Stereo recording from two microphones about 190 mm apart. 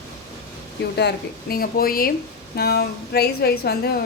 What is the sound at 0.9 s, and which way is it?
A woman's voice, 55° left (ahead or behind).